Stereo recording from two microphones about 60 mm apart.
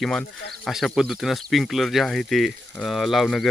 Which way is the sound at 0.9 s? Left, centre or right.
Centre.